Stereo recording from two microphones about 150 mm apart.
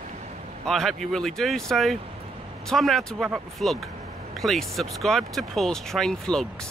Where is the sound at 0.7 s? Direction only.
Centre (ahead or behind).